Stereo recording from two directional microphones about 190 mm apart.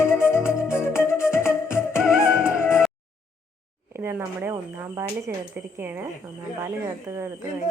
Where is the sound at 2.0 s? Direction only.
5° right (ahead or behind).